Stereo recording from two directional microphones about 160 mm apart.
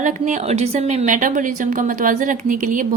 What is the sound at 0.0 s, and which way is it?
A woman's voice, 45° right (ahead or behind).